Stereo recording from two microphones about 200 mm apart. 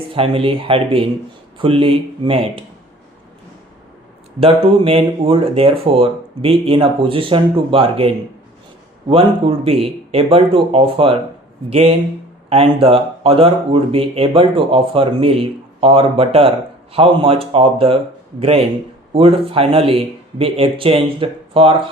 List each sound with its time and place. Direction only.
0.1 s speech: 25° right (ahead or behind)
4.4 s speech: 30° right (ahead or behind)